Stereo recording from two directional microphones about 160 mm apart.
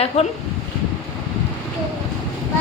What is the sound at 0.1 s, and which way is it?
Speech, 40° left (ahead or behind).